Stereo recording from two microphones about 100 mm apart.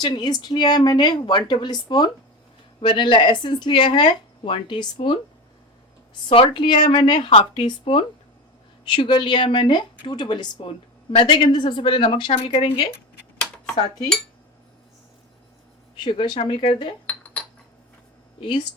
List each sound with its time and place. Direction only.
0.0 s speech: 45° left (ahead or behind)
6.2 s speech: 60° left (ahead or behind)
10.7 s speech: 65° left (ahead or behind)
16.0 s speech: 50° left (ahead or behind)
17.1 s cutlery: 10° left (ahead or behind)
18.3 s speech: 55° left (ahead or behind)